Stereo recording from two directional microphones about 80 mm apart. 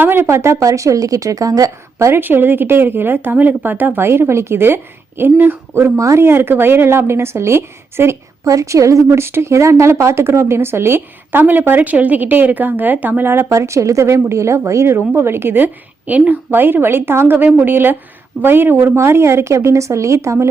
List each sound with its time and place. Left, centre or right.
0.0 s a woman's voice: right